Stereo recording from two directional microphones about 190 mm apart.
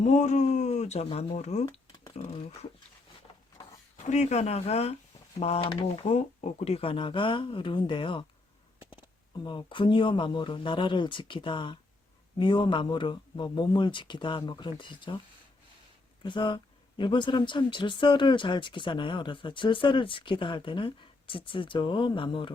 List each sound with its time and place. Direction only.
0.0 s speech: 35° left (ahead or behind)
3.9 s speech: 35° left (ahead or behind)
16.2 s speech: 25° left (ahead or behind)